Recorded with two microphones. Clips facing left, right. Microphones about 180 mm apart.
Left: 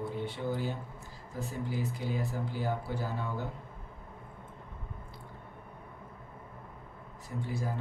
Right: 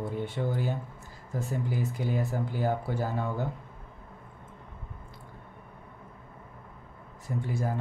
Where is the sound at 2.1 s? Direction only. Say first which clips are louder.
Right 4 dB; 50° right (ahead or behind).